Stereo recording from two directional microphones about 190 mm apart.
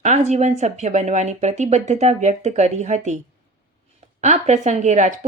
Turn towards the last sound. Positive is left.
turn(degrees=-40)  # may be behind; listen again after turning